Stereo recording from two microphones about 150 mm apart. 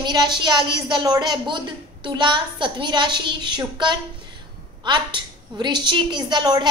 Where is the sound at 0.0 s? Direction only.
30° right (ahead or behind).